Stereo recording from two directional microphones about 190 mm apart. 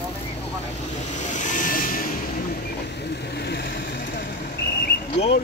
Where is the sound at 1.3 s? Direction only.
40° left (ahead or behind).